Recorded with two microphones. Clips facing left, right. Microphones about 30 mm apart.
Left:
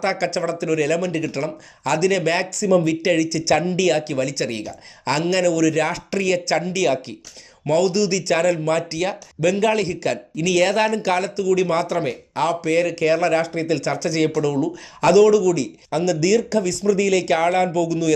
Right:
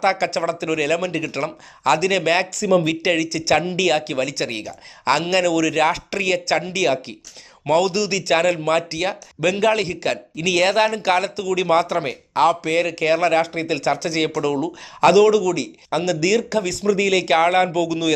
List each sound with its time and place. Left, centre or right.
0.0 s speech: centre
8.9 s speech: centre
11.3 s speech: right
11.7 s speech: centre